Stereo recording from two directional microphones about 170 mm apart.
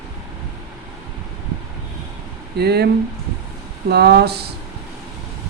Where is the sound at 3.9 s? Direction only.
70° right (ahead or behind).